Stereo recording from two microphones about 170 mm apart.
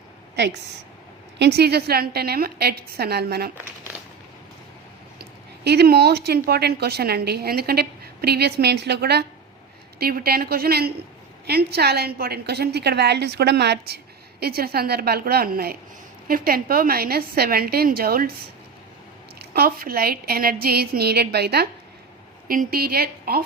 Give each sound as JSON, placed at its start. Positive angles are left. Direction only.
{"t": 0.3, "sound": "a woman's voice", "side_deg": -90}
{"t": 1.4, "sound": "a woman's voice", "side_deg": -75}
{"t": 5.6, "sound": "a woman's voice", "side_deg": -70}
{"t": 10.0, "sound": "a woman's voice", "side_deg": -60}
{"t": 19.5, "sound": "a woman's voice", "side_deg": -65}
{"t": 22.4, "sound": "a woman's voice", "side_deg": -60}